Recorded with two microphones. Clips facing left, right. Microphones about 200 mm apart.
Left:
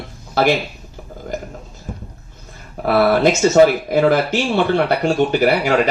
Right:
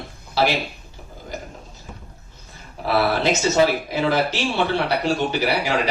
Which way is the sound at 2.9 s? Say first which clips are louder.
Left 6 dB; 50° left (ahead or behind).